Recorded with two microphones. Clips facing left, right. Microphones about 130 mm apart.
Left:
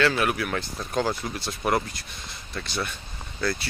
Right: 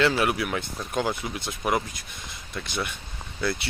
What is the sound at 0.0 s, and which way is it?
Speech, 25° right (ahead or behind).